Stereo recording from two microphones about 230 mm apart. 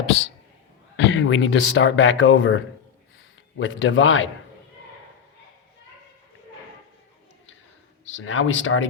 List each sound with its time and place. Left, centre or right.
0.9 s speech: left
3.6 s speech: left
8.1 s speech: left